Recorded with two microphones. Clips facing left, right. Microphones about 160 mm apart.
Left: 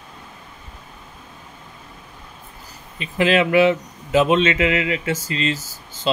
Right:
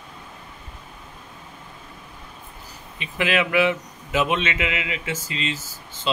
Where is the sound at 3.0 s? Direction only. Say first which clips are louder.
Left 5 dB; 35° left (ahead or behind).